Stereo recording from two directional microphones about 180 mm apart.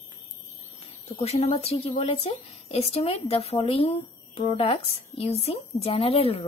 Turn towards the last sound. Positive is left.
turn(degrees=35)  # may be behind; listen again after turning